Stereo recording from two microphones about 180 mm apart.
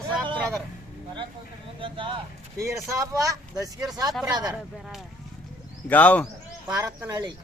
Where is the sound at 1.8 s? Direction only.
30° right (ahead or behind).